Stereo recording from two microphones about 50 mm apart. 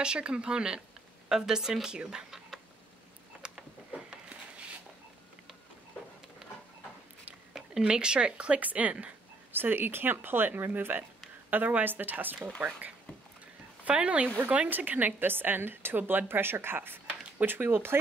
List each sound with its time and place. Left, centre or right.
0.0 s speech: centre
6.4 s a sound: centre
7.8 s a woman's voice: centre
9.5 s a woman's voice: right
13.8 s a woman's voice: right
14.7 s a woman's voice: right
17.1 s a sound: right
17.5 s a woman's voice: right